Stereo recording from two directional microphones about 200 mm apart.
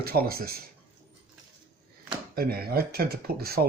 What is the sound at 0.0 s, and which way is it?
Speech, 50° right (ahead or behind).